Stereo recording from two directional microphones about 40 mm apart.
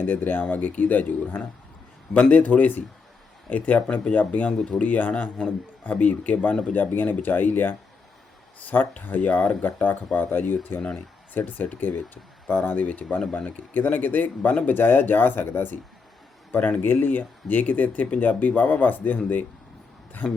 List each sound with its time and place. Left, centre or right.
0.0 s a man's voice: left
9.0 s speech: left
11.3 s speech: left
12.7 s a man's voice: left
16.5 s speech: left